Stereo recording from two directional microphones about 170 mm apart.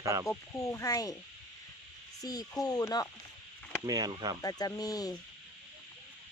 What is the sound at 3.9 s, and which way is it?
Speech, 25° right (ahead or behind).